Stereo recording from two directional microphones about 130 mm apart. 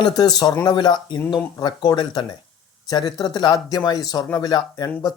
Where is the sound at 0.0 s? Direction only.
30° left (ahead or behind).